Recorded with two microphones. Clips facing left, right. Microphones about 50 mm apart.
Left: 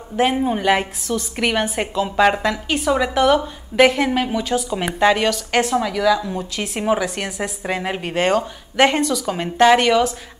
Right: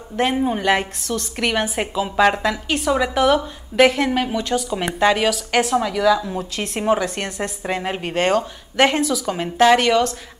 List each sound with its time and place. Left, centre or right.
0.1 s a woman's voice: centre